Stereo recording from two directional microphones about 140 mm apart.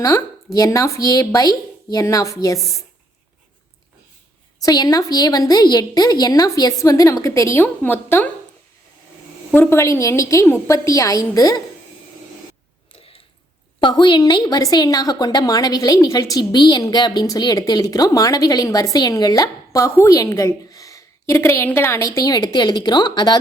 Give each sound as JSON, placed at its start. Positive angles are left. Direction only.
{"t": 0.0, "sound": "a woman's voice", "side_deg": 25}
{"t": 4.6, "sound": "a woman's voice", "side_deg": 25}
{"t": 9.5, "sound": "a woman's voice", "side_deg": 15}
{"t": 13.8, "sound": "a woman's voice", "side_deg": 35}